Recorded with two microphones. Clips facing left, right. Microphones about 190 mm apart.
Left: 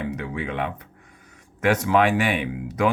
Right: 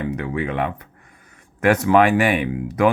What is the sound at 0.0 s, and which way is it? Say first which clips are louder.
Speech: right 4 dB; 55° right (ahead or behind).